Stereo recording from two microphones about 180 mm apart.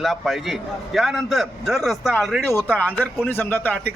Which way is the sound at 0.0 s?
Centre (ahead or behind).